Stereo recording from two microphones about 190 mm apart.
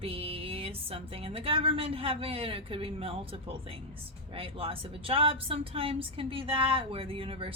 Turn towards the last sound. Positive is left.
turn(degrees=-30)  # may be behind; listen again after turning